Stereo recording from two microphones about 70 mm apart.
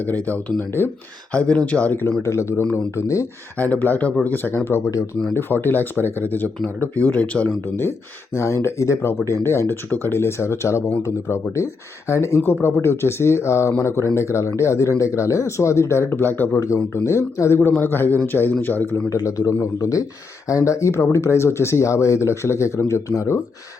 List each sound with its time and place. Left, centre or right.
0.0 s speech: left
2.2 s speech: left
3.6 s speech: left
7.4 s speech: left
16.6 s speech: left
19.5 s speech: left